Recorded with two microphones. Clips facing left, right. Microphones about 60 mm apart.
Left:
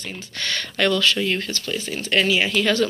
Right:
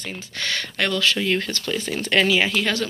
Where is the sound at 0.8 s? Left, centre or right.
Right.